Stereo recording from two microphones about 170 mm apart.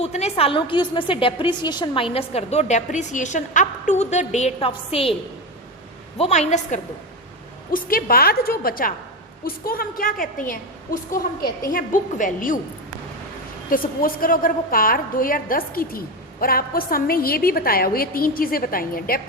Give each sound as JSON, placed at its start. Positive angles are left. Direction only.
{"t": 0.0, "sound": "a woman's voice", "side_deg": 40}
{"t": 6.1, "sound": "a woman's voice", "side_deg": 40}
{"t": 7.7, "sound": "a woman's voice", "side_deg": 55}
{"t": 13.7, "sound": "a woman's voice", "side_deg": 55}